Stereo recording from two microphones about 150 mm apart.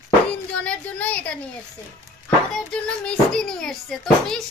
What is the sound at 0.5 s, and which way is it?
Speech, 10° left (ahead or behind).